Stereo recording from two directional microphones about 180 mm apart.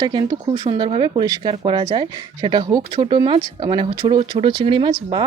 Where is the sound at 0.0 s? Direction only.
25° right (ahead or behind).